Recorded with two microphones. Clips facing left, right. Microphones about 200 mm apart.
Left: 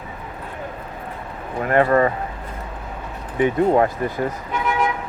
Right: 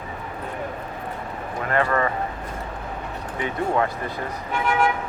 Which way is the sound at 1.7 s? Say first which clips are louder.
Left 6 dB; 35° left (ahead or behind).